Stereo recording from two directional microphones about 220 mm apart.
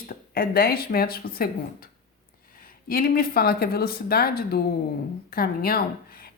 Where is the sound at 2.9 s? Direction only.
40° left (ahead or behind).